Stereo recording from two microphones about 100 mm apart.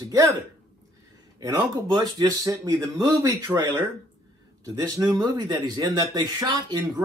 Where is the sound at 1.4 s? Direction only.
45° right (ahead or behind).